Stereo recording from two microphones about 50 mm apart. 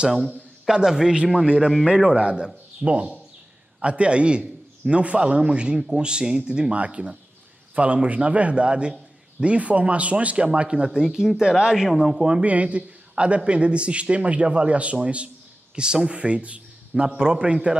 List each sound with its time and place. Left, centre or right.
0.7 s a man's voice: centre
10.9 s speech: centre
12.3 s a man's voice: right